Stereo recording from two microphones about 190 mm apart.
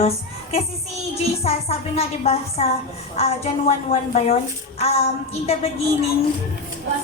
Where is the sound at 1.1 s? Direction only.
35° left (ahead or behind).